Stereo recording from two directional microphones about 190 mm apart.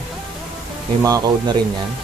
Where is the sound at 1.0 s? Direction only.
20° right (ahead or behind).